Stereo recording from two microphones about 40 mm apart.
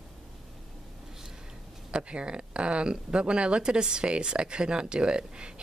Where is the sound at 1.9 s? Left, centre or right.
Right.